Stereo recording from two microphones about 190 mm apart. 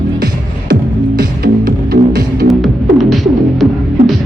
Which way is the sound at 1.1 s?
50° right (ahead or behind).